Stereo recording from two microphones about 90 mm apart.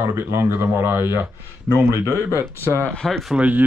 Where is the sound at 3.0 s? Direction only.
Centre (ahead or behind).